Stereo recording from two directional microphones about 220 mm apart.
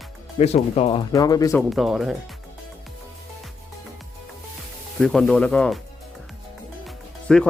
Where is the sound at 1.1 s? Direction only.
15° left (ahead or behind).